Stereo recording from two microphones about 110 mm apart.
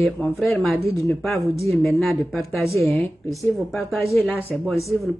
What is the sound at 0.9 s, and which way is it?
Speech, 30° left (ahead or behind).